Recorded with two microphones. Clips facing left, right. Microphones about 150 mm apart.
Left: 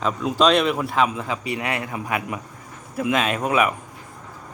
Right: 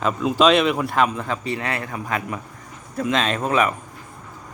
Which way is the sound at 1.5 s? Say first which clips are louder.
Even; 15° left (ahead or behind).